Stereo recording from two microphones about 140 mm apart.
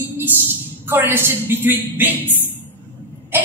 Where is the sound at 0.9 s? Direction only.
15° right (ahead or behind).